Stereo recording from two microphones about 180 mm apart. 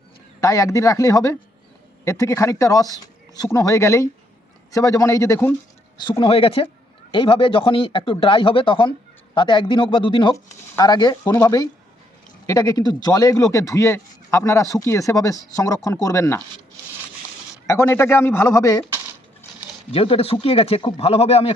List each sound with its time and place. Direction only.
0.4 s speech: 20° left (ahead or behind)
6.0 s speech: 25° left (ahead or behind)
17.7 s speech: 15° left (ahead or behind)
19.9 s speech: 35° left (ahead or behind)